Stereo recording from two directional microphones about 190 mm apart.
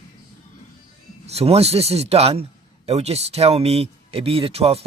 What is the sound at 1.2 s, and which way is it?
Speech, 35° right (ahead or behind).